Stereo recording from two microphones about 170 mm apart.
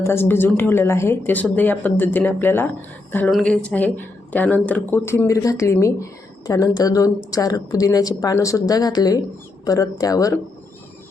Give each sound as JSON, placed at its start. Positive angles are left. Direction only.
{"t": 0.0, "sound": "a woman's voice", "side_deg": 15}